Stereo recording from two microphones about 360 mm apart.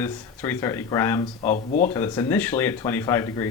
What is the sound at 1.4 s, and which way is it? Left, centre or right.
Speech, left.